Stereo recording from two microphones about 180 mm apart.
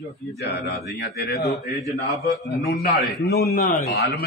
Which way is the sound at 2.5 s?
60° left (ahead or behind).